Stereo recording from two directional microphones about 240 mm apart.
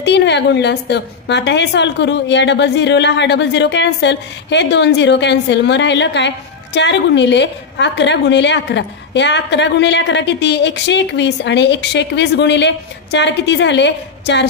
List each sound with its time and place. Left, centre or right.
0.0 s a woman's voice: left